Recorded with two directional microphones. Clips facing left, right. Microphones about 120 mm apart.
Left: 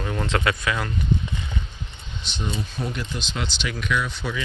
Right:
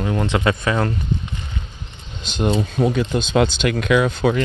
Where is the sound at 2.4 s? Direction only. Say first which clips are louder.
Right 11 dB; 80° right.